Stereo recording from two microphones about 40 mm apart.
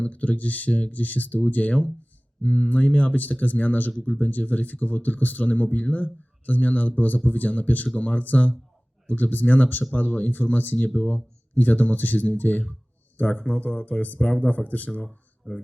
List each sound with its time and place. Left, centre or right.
0.0 s speech: left
2.6 s speech: left
10.8 s speech: left